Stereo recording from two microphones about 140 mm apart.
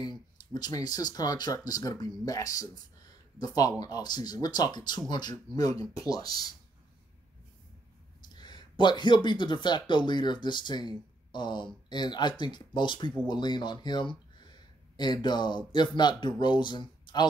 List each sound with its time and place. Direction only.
0.0 s speech: 30° left (ahead or behind)
8.4 s speech: 30° left (ahead or behind)